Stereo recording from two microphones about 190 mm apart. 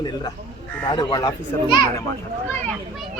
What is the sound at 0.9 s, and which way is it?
Speech, 20° left (ahead or behind).